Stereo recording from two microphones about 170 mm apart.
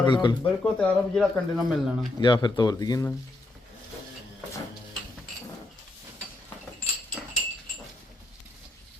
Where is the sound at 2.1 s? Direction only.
25° left (ahead or behind).